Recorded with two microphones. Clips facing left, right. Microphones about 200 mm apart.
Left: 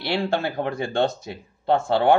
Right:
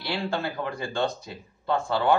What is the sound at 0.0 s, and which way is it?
Speech, 70° left (ahead or behind).